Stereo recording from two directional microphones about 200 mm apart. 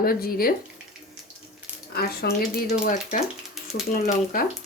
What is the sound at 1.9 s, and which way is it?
Speech, 50° left (ahead or behind).